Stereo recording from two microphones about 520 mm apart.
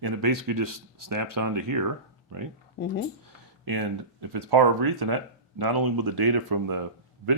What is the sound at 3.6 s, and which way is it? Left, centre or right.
Speech, right.